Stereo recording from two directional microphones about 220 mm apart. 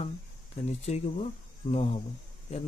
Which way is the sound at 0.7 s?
30° left (ahead or behind).